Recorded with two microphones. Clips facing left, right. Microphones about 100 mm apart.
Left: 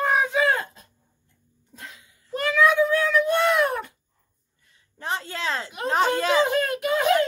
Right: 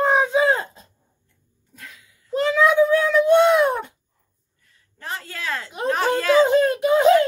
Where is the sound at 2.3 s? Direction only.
20° right (ahead or behind).